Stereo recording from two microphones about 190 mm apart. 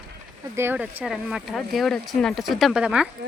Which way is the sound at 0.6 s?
10° right (ahead or behind).